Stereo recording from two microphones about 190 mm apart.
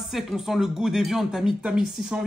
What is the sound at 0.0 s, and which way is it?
A woman's voice, centre (ahead or behind).